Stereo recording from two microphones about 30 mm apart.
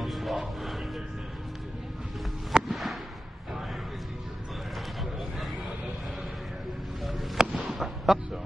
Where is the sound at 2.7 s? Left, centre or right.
Centre.